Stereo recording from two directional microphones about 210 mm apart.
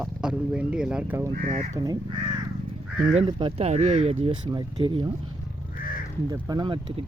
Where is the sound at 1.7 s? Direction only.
20° right (ahead or behind).